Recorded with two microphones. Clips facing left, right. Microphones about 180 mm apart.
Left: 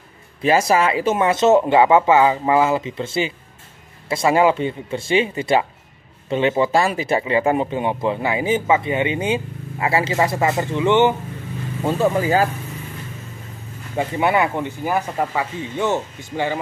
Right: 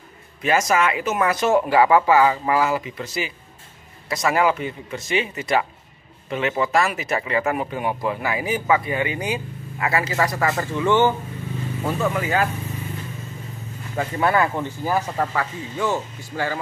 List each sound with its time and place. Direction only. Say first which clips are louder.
0.4 s speech: left 3 dB; 30° left (ahead or behind)
11.8 s speech: left 5 dB; 30° left (ahead or behind)
13.9 s speech: left 2 dB; 20° left (ahead or behind)